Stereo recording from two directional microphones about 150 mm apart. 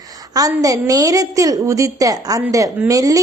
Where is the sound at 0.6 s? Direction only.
25° right (ahead or behind).